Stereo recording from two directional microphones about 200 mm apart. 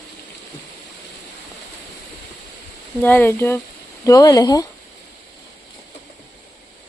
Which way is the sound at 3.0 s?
10° left (ahead or behind).